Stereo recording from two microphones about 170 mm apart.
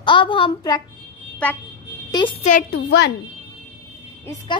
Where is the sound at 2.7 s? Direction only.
75° left (ahead or behind).